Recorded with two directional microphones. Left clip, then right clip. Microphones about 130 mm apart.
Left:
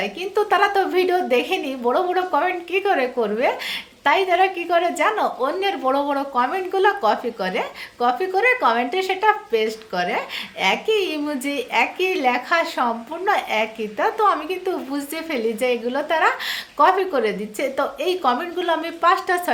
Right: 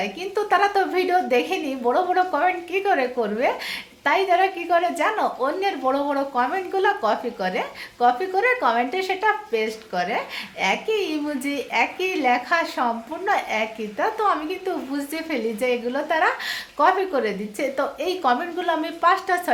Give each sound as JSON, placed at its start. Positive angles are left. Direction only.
{"t": 0.0, "sound": "a woman's voice", "side_deg": 25}